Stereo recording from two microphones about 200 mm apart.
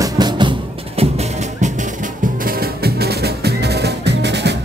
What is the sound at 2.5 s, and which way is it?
Music, 50° right (ahead or behind).